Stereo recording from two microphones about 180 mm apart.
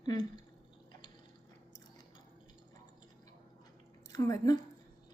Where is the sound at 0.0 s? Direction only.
20° left (ahead or behind).